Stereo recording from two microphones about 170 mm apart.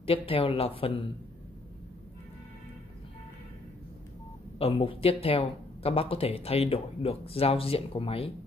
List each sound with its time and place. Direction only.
0.0 s speech: 35° left (ahead or behind)
4.6 s speech: 35° left (ahead or behind)